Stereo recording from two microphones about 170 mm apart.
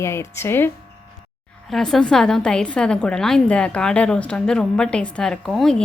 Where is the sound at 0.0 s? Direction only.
15° left (ahead or behind).